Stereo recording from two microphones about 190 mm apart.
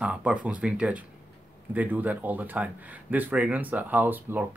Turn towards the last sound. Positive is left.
turn(degrees=-10)  # may be behind; listen again after turning